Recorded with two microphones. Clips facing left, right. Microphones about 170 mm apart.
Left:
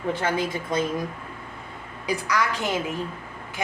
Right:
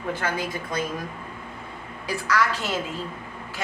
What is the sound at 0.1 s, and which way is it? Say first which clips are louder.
Speech: left 3 dB; 25° left (ahead or behind).